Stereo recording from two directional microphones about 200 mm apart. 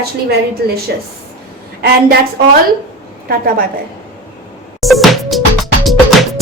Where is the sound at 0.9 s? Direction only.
55° right (ahead or behind).